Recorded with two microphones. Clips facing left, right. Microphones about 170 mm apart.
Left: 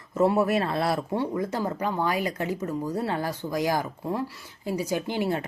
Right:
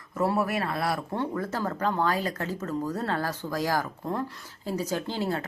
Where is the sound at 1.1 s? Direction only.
15° left (ahead or behind).